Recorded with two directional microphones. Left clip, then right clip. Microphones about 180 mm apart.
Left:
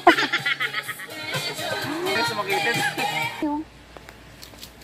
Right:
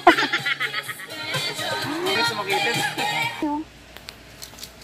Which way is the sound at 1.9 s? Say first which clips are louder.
Right 1 dB; centre (ahead or behind).